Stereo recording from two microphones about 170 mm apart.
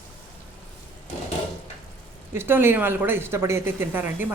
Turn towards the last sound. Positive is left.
turn(degrees=-10)  # may be behind; listen again after turning